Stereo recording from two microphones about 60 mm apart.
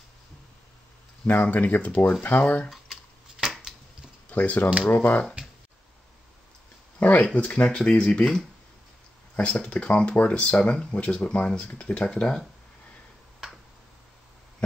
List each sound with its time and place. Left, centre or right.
1.2 s speech: left
2.7 s a sound: centre
4.3 s speech: left
7.0 s speech: left
13.4 s tick-tock: centre